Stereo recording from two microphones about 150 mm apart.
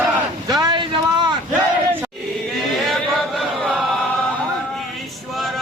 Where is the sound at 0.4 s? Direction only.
25° right (ahead or behind).